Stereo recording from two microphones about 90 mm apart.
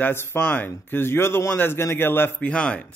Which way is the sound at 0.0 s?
25° left (ahead or behind).